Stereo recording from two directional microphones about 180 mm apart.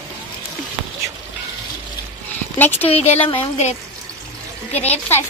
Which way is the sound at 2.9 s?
35° left (ahead or behind).